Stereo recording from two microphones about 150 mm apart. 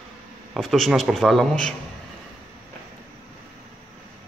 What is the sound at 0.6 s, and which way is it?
Speech, centre (ahead or behind).